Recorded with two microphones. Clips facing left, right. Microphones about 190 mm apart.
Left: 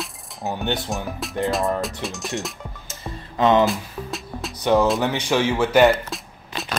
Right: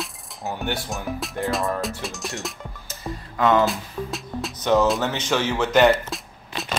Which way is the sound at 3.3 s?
20° left (ahead or behind).